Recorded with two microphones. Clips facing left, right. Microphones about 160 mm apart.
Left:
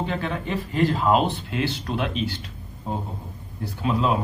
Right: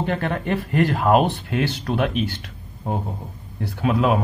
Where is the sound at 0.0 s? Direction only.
60° right (ahead or behind).